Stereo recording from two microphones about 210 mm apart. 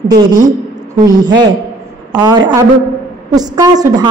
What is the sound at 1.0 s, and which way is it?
A woman's voice, 20° right (ahead or behind).